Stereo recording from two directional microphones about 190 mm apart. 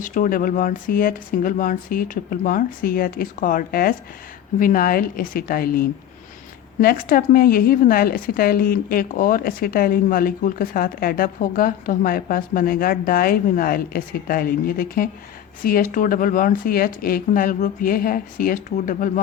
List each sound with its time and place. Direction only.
0.1 s a woman's voice: 45° left (ahead or behind)